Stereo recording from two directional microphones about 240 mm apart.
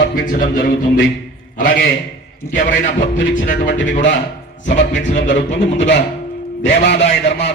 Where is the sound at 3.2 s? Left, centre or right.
Left.